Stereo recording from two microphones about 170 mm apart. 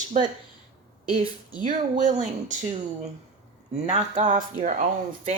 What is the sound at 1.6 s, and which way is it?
Speech, 45° right (ahead or behind).